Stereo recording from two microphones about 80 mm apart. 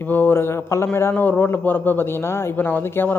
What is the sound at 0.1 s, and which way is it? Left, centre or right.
A man's voice, left.